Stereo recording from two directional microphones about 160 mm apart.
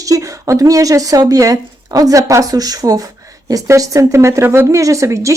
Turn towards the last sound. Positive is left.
turn(degrees=-20)  # may be behind; listen again after turning